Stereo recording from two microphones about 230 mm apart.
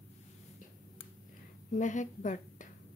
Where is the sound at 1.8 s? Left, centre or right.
Left.